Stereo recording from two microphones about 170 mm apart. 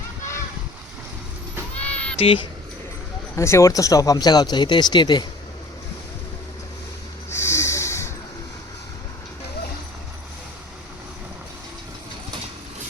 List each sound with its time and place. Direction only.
1.8 s a sound: 5° left (ahead or behind)
2.1 s speech: 35° left (ahead or behind)
3.3 s speech: 15° left (ahead or behind)
7.3 s snort: 15° left (ahead or behind)